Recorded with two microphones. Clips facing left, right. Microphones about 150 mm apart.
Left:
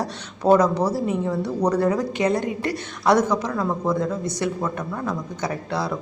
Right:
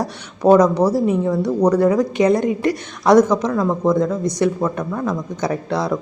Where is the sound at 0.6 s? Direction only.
15° right (ahead or behind).